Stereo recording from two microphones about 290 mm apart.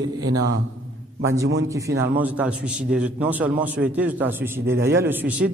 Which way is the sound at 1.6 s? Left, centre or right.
Centre.